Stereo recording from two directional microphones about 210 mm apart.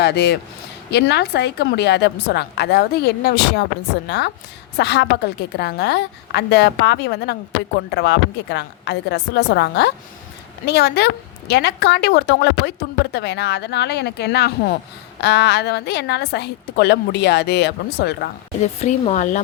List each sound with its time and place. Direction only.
0.0 s a woman's voice: 50° left (ahead or behind)
18.6 s speech: 30° left (ahead or behind)